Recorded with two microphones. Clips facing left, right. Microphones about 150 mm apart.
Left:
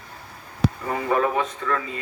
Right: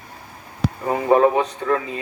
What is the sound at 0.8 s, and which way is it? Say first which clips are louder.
A man's voice: right 9 dB; 35° right (ahead or behind).